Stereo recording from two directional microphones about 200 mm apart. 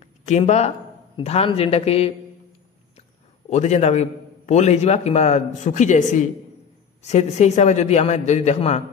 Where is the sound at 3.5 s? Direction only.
35° left (ahead or behind).